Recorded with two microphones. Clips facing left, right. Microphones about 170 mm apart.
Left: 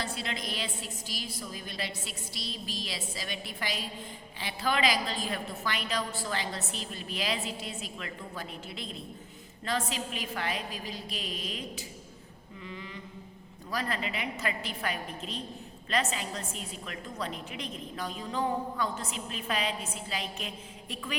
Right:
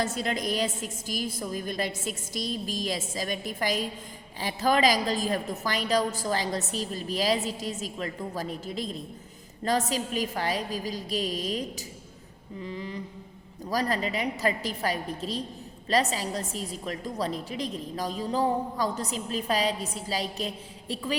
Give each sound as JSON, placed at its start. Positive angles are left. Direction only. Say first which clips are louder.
{"t": 0.0, "sound": "a woman's voice", "louder": "right 7 dB", "side_deg": -45}